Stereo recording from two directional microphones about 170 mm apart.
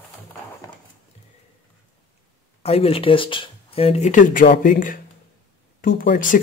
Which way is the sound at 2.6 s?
35° left (ahead or behind).